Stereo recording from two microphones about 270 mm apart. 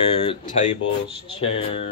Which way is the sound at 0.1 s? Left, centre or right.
Left.